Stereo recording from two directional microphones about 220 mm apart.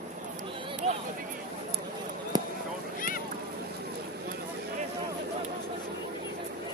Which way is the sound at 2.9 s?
40° left (ahead or behind).